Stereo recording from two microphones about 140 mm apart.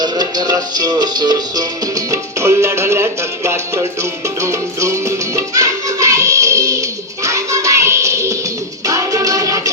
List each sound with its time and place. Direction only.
0.0 s music: 30° right (ahead or behind)